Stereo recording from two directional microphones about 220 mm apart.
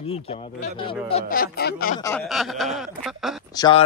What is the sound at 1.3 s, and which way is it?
Speech, 40° left (ahead or behind).